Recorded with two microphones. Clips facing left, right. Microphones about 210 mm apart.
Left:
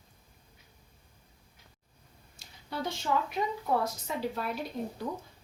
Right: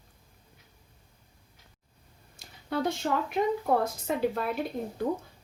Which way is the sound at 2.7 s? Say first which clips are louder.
Right 4 dB; 55° right (ahead or behind).